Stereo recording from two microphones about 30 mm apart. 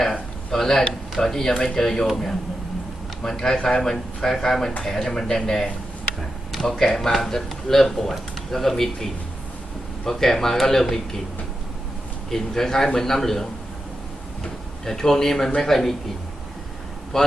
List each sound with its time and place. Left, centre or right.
0.0 s a sound: centre
1.2 s speech: centre
3.2 s speech: centre
6.6 s speech: centre
10.1 s speech: centre
12.3 s speech: centre
14.8 s speech: centre
17.1 s speech: centre